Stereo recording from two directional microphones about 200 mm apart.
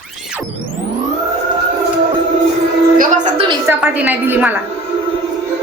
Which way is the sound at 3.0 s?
40° right (ahead or behind).